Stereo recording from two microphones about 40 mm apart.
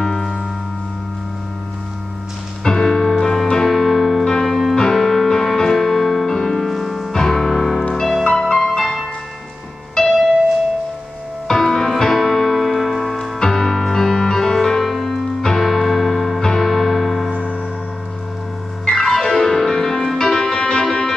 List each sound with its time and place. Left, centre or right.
0.0 s music: centre
2.6 s music: centre
4.2 s music: centre
11.4 s music: centre
16.3 s music: centre
16.6 s music: centre
17.3 s music: right
18.9 s music: centre